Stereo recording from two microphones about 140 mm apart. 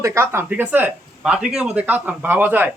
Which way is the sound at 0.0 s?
20° right (ahead or behind).